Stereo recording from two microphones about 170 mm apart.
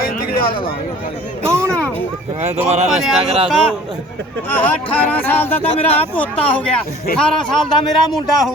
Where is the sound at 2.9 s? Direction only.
Centre (ahead or behind).